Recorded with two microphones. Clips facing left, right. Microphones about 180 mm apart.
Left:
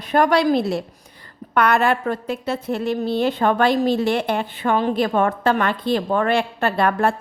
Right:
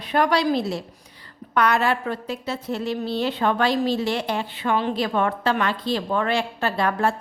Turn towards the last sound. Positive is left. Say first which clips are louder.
# left 3 dB
turn(degrees=60)  # may be behind; listen again after turning